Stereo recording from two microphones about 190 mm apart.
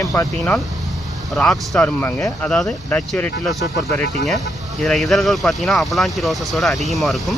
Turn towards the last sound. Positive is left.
turn(degrees=0)  # may be behind; listen again after turning